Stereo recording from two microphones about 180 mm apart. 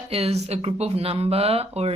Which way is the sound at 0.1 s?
35° right (ahead or behind).